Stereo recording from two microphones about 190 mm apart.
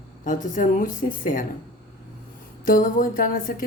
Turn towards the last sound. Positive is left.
turn(degrees=45)  # may be behind; listen again after turning